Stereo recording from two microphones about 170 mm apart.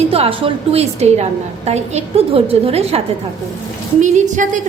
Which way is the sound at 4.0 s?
45° right (ahead or behind).